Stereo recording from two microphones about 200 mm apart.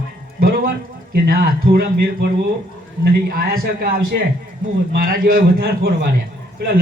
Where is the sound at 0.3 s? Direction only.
50° right (ahead or behind).